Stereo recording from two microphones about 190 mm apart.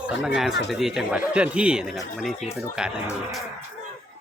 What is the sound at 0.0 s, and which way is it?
Speech, 5° right (ahead or behind).